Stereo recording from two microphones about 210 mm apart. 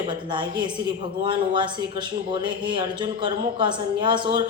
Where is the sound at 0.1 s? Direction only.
20° right (ahead or behind).